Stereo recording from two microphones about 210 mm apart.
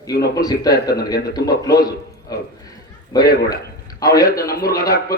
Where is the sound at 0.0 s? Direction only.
15° left (ahead or behind).